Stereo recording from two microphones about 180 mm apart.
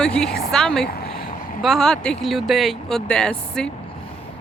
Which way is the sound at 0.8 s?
60° left (ahead or behind).